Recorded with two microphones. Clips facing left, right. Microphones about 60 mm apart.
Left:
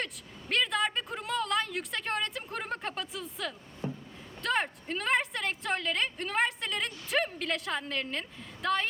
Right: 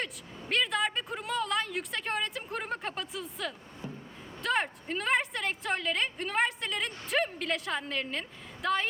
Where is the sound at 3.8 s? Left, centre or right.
Left.